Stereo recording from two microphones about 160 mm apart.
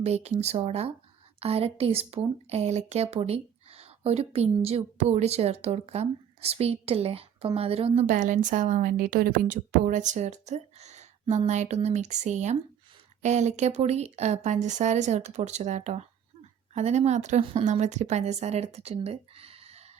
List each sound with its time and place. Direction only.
0.0 s speech: 40° right (ahead or behind)